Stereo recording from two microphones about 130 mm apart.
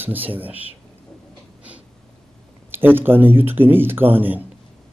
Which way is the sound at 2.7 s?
15° right (ahead or behind).